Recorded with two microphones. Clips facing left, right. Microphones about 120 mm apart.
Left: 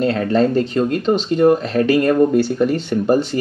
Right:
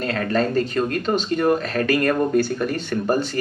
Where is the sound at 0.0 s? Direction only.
20° left (ahead or behind).